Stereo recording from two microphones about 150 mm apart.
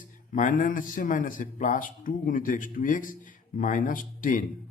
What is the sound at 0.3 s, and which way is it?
Speech, 60° left (ahead or behind).